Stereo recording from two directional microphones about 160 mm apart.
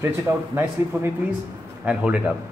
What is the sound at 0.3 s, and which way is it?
A man's voice, 20° right (ahead or behind).